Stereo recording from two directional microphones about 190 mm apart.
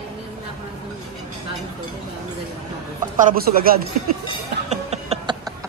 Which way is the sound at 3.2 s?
45° right (ahead or behind).